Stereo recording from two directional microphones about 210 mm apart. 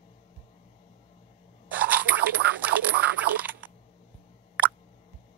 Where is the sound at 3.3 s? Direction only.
10° right (ahead or behind).